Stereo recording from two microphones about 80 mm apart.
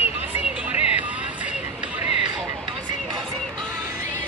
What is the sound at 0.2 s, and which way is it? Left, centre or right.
Music, right.